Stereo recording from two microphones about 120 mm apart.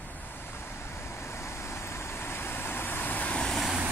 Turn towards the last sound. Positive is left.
turn(degrees=0)  # may be behind; listen again after turning